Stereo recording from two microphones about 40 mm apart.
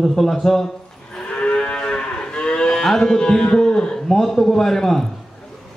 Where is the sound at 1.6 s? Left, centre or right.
Left.